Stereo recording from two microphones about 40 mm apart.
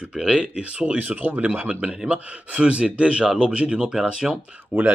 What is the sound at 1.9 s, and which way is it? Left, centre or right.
Speech, right.